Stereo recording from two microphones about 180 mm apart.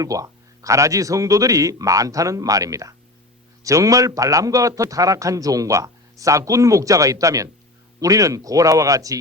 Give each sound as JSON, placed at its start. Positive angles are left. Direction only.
{"t": 0.0, "sound": "a man's voice", "side_deg": -20}